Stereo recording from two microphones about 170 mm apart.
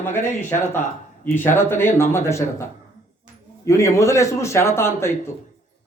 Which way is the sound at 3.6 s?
15° left (ahead or behind).